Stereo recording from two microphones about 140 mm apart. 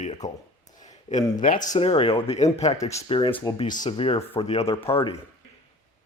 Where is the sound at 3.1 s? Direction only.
35° left (ahead or behind).